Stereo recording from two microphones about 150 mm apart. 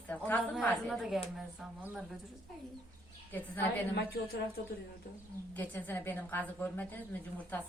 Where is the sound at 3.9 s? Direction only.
90° left.